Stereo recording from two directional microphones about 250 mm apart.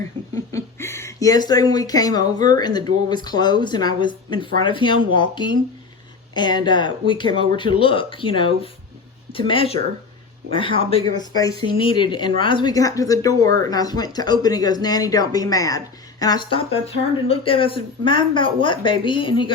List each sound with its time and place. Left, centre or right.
0.5 s speech: centre